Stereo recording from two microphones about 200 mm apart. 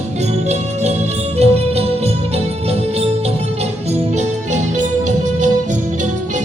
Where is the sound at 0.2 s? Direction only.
35° right (ahead or behind).